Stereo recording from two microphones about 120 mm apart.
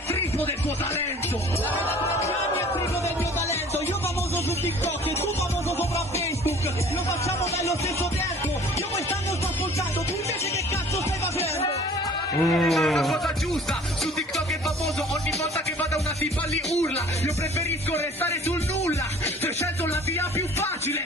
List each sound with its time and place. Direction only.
12.4 s speech: 5° left (ahead or behind)
20.2 s music: 20° left (ahead or behind)